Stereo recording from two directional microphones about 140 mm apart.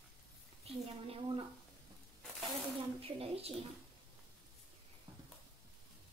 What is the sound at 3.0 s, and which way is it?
Speech, 45° right (ahead or behind).